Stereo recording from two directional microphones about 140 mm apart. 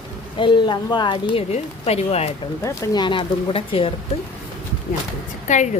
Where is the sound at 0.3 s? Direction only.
35° left (ahead or behind).